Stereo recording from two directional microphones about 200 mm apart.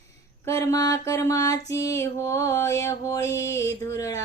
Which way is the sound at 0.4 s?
15° left (ahead or behind).